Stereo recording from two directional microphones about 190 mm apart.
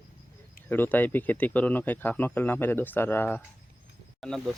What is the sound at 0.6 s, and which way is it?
Speech, 10° left (ahead or behind).